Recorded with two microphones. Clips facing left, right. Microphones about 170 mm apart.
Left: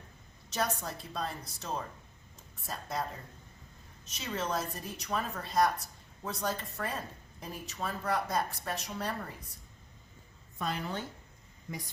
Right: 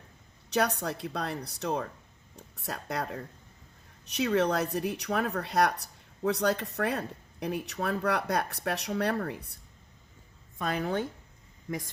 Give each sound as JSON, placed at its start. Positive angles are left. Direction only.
{"t": 0.5, "sound": "speech", "side_deg": -65}
{"t": 10.6, "sound": "a woman's voice", "side_deg": -55}